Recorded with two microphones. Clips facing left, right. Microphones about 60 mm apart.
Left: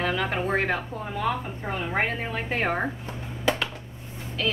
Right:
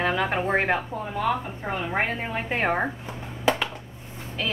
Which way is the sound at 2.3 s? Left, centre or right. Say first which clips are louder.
Right 3 dB; right.